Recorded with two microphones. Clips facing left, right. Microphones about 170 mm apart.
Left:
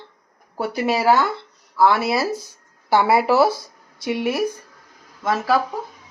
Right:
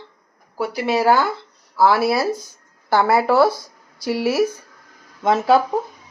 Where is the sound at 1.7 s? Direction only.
5° right (ahead or behind).